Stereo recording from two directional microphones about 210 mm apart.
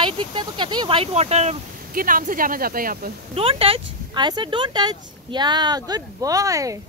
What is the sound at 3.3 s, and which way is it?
Speech, 25° right (ahead or behind).